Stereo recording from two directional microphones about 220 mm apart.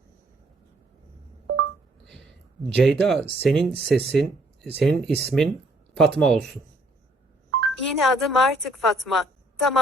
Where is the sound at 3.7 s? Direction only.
10° right (ahead or behind).